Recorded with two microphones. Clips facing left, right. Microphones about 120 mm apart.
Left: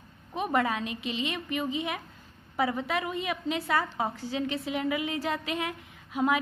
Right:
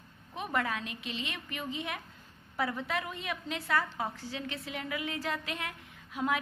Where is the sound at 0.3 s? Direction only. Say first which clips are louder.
Left 6 dB; 20° left (ahead or behind).